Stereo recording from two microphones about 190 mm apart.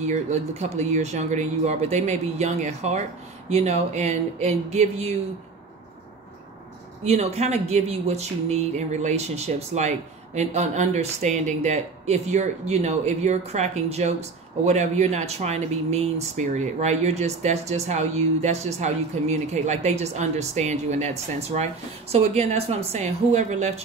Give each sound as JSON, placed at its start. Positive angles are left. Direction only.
{"t": 0.0, "sound": "speech", "side_deg": -35}
{"t": 7.1, "sound": "speech", "side_deg": -35}